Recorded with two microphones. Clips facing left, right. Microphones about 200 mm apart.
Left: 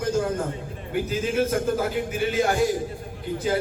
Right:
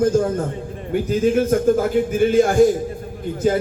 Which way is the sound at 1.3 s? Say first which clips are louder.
Right 5 dB; 50° right (ahead or behind).